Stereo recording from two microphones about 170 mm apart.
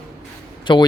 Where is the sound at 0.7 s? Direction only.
30° left (ahead or behind).